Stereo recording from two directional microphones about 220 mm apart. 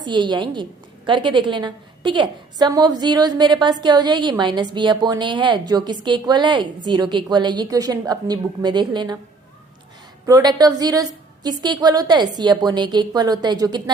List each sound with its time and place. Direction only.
0.0 s a woman's voice: 20° right (ahead or behind)
10.2 s a woman's voice: 15° right (ahead or behind)